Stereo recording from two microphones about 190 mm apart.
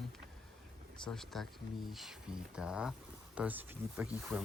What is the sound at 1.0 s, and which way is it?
Speech, centre (ahead or behind).